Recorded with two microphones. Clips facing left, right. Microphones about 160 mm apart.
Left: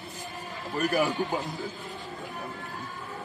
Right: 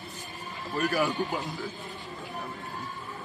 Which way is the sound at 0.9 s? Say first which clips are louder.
Left 3 dB; 20° left (ahead or behind).